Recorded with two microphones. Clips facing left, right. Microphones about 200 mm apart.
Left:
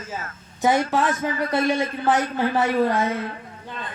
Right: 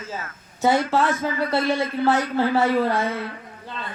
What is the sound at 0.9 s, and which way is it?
Speech, 15° left (ahead or behind).